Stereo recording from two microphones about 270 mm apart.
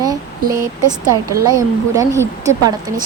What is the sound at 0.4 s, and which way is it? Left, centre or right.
Speech, right.